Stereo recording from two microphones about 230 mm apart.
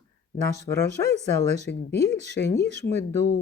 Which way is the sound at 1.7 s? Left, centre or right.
Left.